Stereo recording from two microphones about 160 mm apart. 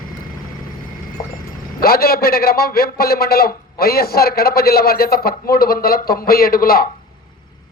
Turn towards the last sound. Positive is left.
turn(degrees=65)  # may be behind; listen again after turning